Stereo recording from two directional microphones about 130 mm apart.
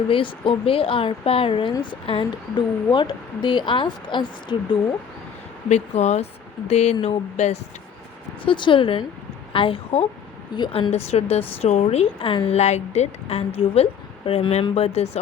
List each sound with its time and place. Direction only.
0.1 s a woman's voice: 40° left (ahead or behind)
5.6 s a woman's voice: 60° left (ahead or behind)
8.4 s a woman's voice: 40° left (ahead or behind)
12.5 s a woman's voice: 60° left (ahead or behind)